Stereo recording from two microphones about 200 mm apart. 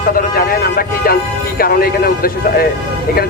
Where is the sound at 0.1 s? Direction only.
45° left (ahead or behind).